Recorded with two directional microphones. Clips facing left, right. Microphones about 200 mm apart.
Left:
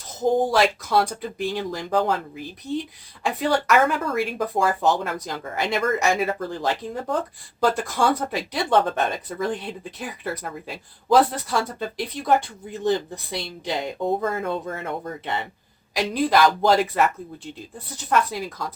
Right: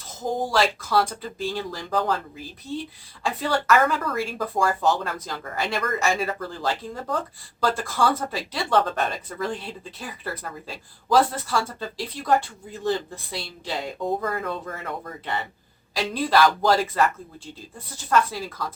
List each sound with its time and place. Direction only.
1.4 s speech: 15° left (ahead or behind)